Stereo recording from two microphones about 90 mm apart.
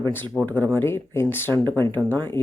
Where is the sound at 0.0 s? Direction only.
25° left (ahead or behind).